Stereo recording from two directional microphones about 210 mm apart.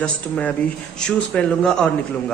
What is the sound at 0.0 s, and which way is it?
Speech, 5° left (ahead or behind).